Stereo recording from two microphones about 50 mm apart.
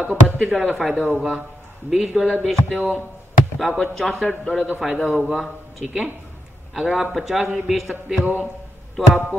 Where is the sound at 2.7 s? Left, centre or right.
Right.